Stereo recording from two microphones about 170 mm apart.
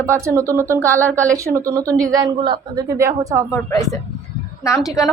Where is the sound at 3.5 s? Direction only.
20° left (ahead or behind).